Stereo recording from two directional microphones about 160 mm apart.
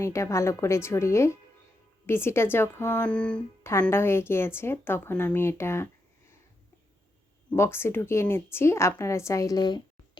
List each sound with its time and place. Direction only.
0.0 s speech: 20° left (ahead or behind)
7.5 s speech: 15° left (ahead or behind)